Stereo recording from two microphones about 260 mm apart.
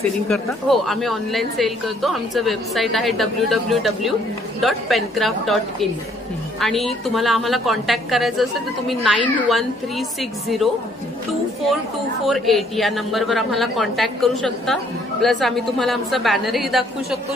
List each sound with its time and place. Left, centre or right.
0.3 s speech: centre
12.3 s speech: centre